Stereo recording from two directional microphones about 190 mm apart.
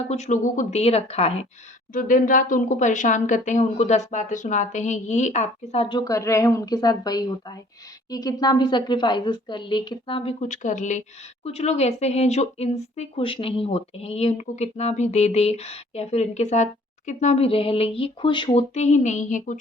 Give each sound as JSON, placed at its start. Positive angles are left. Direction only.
{"t": 0.1, "sound": "a woman's voice", "side_deg": 35}
{"t": 1.9, "sound": "a woman's voice", "side_deg": 45}